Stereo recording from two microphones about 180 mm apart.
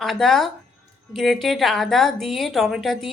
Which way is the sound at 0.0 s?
Centre (ahead or behind).